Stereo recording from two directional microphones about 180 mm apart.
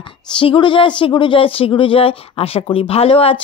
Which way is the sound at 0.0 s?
30° left (ahead or behind).